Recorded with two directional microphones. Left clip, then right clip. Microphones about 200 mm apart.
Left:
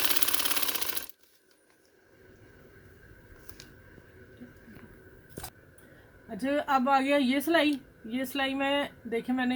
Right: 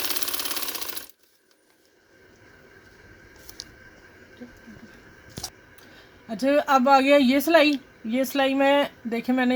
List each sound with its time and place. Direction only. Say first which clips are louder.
0.0 s sewing machine: even; centre (ahead or behind)
6.2 s a woman's voice: right 8 dB; 55° right (ahead or behind)